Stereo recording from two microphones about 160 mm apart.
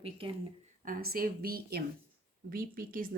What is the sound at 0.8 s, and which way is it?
A woman's voice, 60° right (ahead or behind).